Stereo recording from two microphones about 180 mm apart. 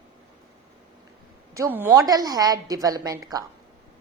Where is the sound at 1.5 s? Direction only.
15° right (ahead or behind).